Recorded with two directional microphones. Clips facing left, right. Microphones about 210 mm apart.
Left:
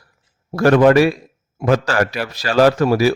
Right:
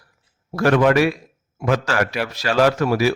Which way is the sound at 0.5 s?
35° left (ahead or behind).